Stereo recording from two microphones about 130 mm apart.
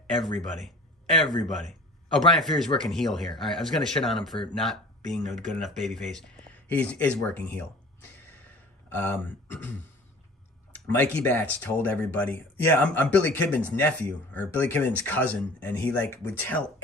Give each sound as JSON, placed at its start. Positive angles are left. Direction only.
{"t": 0.2, "sound": "speech", "side_deg": 0}
{"t": 8.8, "sound": "speech", "side_deg": 15}
{"t": 10.7, "sound": "speech", "side_deg": 15}